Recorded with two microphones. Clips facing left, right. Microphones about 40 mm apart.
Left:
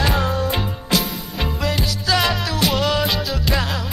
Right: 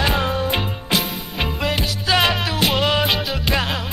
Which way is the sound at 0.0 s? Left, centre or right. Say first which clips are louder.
Even; right.